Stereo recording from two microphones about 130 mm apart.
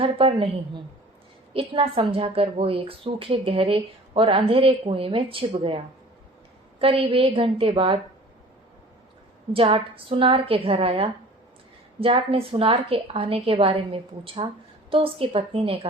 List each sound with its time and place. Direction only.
0.0 s a woman's voice: 45° right (ahead or behind)
9.5 s a woman's voice: 45° right (ahead or behind)